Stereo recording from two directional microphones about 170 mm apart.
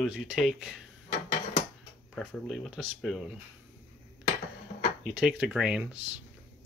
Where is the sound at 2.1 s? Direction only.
Centre (ahead or behind).